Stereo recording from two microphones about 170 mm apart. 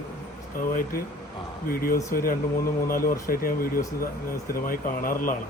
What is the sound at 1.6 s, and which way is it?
Speech, 60° left (ahead or behind).